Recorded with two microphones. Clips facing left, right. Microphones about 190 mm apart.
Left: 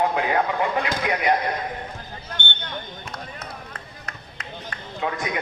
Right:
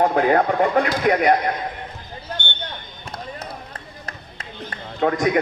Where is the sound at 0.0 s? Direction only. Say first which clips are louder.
Right 5 dB; 45° right (ahead or behind).